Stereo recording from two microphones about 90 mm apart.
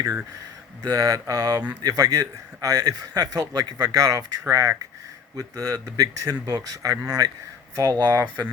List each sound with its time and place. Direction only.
0.8 s a man's voice: 40° right (ahead or behind)
7.9 s speech: 60° right (ahead or behind)